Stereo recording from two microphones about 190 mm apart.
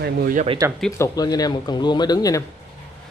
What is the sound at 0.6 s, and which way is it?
Speech, 15° right (ahead or behind).